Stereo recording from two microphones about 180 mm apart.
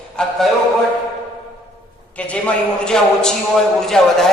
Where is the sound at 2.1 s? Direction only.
5° left (ahead or behind).